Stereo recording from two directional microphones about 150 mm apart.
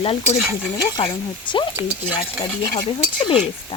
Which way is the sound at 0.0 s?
40° left (ahead or behind).